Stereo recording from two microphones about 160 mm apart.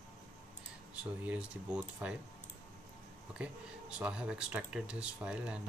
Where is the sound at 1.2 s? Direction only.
10° right (ahead or behind).